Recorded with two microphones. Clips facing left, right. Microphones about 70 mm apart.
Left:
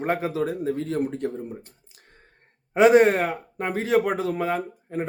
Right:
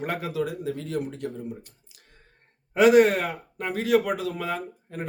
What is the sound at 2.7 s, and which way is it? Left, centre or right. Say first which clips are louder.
Speech: left 1 dB; left.